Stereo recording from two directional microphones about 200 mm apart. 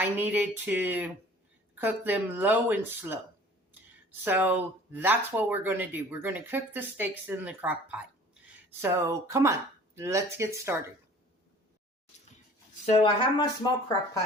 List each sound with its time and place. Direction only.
0.0 s speech: 10° right (ahead or behind)
4.2 s speech: 10° right (ahead or behind)
12.8 s speech: 30° left (ahead or behind)